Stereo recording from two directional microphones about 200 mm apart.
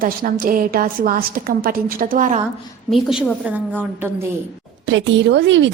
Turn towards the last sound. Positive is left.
turn(degrees=-60)  # may be behind; listen again after turning